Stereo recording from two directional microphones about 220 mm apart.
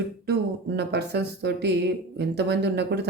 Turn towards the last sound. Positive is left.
turn(degrees=-50)  # may be behind; listen again after turning